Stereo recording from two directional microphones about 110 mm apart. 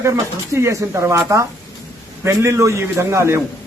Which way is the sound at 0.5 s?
25° right (ahead or behind).